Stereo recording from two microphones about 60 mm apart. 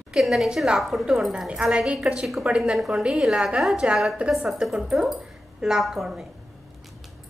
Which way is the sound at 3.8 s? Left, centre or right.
Centre.